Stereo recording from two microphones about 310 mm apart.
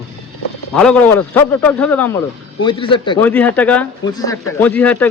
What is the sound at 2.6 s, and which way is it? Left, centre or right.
Speech, centre.